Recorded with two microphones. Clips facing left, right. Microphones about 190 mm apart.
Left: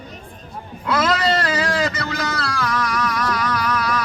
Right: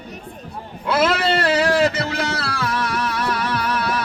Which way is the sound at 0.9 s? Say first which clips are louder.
Right 1 dB; 25° right (ahead or behind).